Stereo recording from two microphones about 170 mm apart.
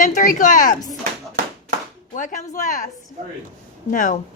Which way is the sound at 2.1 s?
50° left (ahead or behind).